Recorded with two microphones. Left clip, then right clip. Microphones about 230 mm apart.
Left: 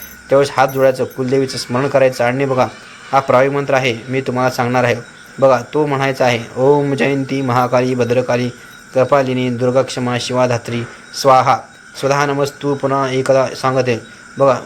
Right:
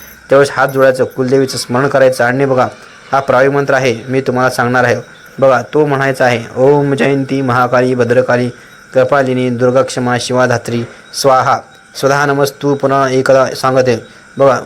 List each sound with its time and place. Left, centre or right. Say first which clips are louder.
0.3 s speech: right 3 dB; centre